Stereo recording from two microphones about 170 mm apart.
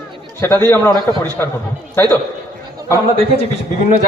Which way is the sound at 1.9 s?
15° left (ahead or behind).